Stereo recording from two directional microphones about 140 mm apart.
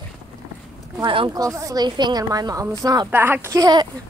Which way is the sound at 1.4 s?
25° right (ahead or behind).